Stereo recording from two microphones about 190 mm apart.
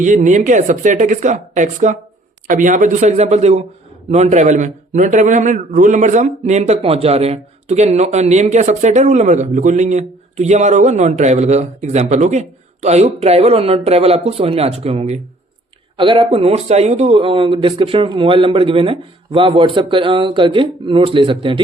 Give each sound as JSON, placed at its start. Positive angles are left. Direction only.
{"t": 0.0, "sound": "a man's voice", "side_deg": -40}